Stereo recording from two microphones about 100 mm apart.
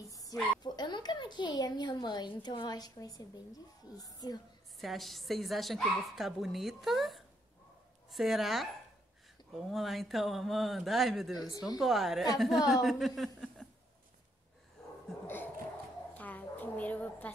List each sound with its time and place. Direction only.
0.1 s a child's voice: 35° left (ahead or behind)
4.7 s a woman's voice: centre (ahead or behind)
15.2 s a sound: 20° left (ahead or behind)